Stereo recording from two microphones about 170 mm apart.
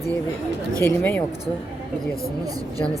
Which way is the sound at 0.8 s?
15° left (ahead or behind).